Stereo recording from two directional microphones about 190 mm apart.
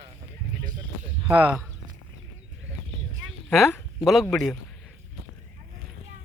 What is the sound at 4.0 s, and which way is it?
Speech, centre (ahead or behind).